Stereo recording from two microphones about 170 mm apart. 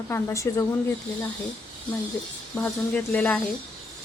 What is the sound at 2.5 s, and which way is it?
Speech, 10° left (ahead or behind).